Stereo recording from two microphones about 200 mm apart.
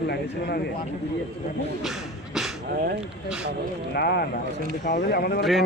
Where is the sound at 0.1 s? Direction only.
55° left (ahead or behind).